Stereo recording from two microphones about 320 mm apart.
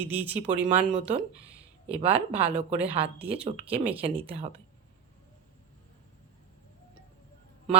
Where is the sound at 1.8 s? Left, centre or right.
Centre.